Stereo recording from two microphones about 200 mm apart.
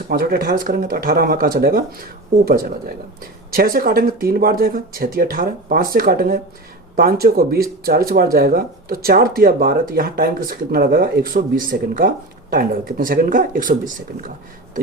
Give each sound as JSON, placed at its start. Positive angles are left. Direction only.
{"t": 0.1, "sound": "speech", "side_deg": -45}